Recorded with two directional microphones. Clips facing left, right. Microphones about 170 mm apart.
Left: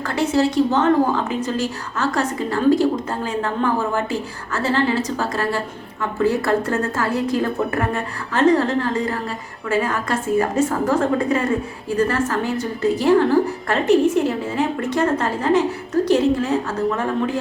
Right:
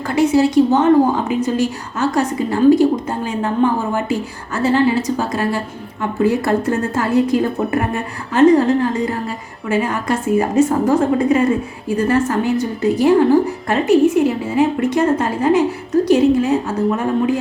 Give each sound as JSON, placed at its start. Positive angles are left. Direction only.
{"t": 0.1, "sound": "a woman's voice", "side_deg": -15}